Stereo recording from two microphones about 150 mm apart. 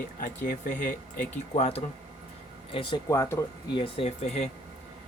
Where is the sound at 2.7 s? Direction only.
25° left (ahead or behind).